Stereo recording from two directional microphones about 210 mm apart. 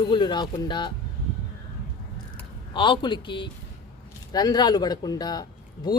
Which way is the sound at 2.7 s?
25° left (ahead or behind).